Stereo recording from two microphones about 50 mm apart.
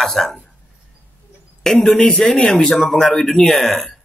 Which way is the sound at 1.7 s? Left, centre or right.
Centre.